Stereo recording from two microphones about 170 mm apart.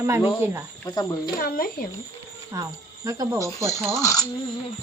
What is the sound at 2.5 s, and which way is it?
A woman's voice, 20° right (ahead or behind).